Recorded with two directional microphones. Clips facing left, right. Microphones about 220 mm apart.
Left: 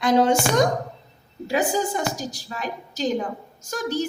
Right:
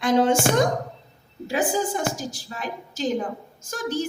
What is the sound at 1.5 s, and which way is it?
A woman's voice, 50° right (ahead or behind).